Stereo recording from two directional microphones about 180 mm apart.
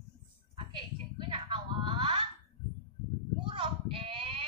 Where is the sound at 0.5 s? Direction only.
30° right (ahead or behind).